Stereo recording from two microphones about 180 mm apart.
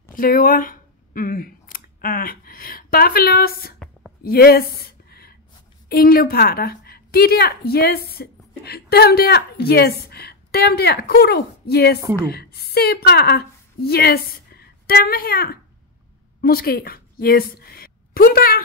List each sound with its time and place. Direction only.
0.1 s speech: 50° left (ahead or behind)
4.2 s a sound: 60° left (ahead or behind)
5.9 s a woman's voice: 55° left (ahead or behind)